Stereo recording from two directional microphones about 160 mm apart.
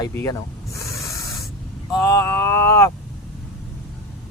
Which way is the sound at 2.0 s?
20° left (ahead or behind).